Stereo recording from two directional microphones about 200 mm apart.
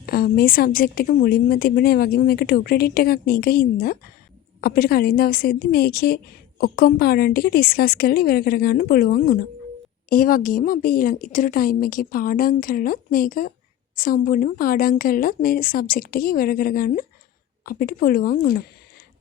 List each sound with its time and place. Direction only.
0.0 s speech: 50° left (ahead or behind)